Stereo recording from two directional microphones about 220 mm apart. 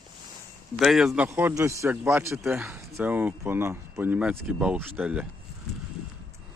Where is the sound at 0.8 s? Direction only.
Centre (ahead or behind).